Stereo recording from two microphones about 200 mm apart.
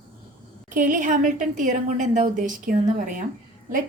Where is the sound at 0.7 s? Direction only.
40° right (ahead or behind).